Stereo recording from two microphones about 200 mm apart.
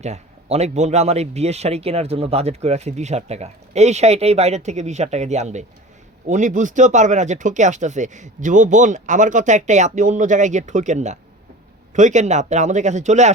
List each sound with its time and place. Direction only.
0.0 s speech: 35° right (ahead or behind)